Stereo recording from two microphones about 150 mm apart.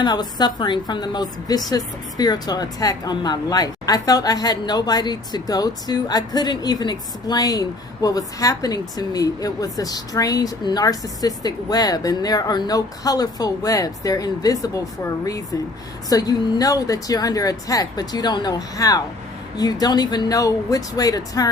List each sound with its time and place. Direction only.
0.0 s speech: 30° left (ahead or behind)
16.0 s speech: 25° left (ahead or behind)